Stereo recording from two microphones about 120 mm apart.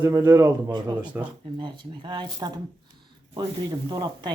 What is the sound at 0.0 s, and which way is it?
Speech, 20° right (ahead or behind).